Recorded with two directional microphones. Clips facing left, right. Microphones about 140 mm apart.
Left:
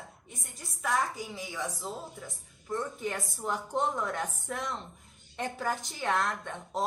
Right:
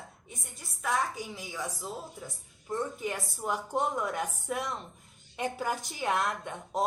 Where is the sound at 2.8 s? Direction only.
Centre (ahead or behind).